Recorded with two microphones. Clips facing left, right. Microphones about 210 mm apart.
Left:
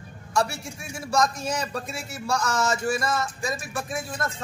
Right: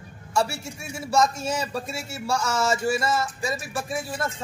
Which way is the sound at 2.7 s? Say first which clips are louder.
Right 2 dB; 25° right (ahead or behind).